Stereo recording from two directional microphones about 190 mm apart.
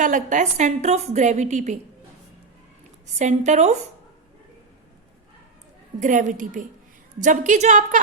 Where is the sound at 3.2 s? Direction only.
40° right (ahead or behind).